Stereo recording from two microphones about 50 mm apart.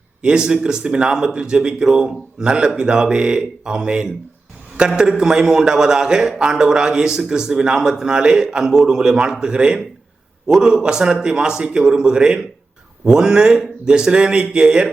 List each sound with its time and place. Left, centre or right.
0.2 s a man's voice: centre